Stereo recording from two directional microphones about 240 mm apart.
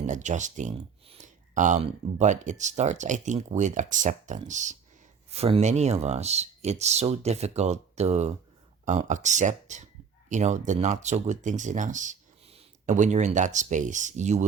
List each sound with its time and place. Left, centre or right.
0.0 s speech: right